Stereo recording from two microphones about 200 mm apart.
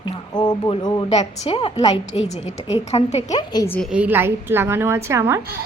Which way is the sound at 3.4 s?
20° left (ahead or behind).